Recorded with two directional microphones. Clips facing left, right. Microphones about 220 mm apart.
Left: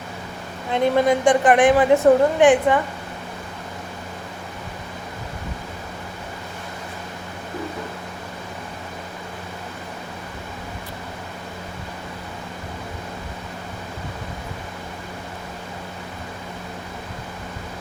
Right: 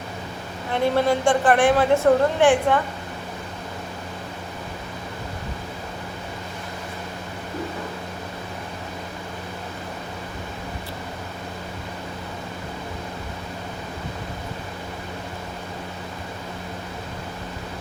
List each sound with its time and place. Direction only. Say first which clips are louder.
0.7 s a woman's voice: left 2 dB; 15° left (ahead or behind)